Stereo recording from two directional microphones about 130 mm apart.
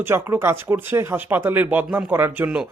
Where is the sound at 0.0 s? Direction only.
20° right (ahead or behind).